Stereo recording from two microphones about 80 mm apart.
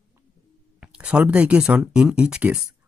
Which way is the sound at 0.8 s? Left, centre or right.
Centre.